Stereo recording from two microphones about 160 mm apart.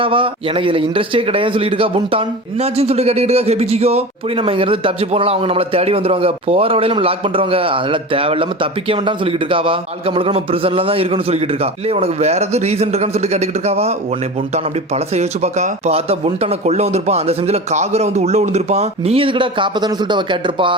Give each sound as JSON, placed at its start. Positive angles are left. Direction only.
{"t": 0.0, "sound": "a man's voice", "side_deg": -35}